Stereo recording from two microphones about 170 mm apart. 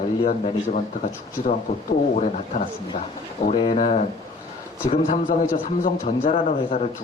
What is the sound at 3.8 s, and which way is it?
A man's voice, 40° left (ahead or behind).